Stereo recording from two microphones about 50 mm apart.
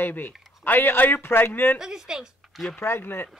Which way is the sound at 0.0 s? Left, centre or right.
Left.